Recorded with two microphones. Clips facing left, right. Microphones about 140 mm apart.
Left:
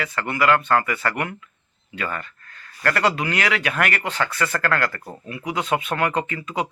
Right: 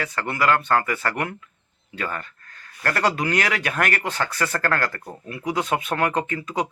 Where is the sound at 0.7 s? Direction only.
40° right (ahead or behind).